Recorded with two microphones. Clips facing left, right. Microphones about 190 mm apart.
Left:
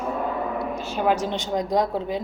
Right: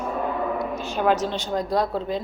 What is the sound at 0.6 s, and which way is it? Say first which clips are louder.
A woman's voice: even; 10° left (ahead or behind).